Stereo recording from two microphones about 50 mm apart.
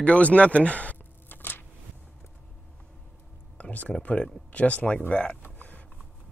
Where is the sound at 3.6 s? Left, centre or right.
Left.